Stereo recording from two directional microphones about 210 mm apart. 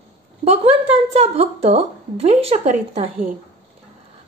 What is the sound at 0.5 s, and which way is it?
A woman's voice, 30° right (ahead or behind).